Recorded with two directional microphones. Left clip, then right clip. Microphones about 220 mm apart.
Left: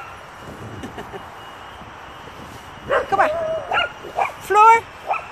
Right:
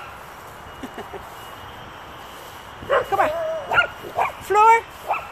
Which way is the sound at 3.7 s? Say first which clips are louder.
Right 1 dB; 15° right (ahead or behind).